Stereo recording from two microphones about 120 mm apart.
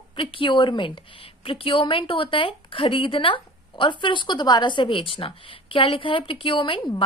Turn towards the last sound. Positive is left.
turn(degrees=45)  # may be behind; listen again after turning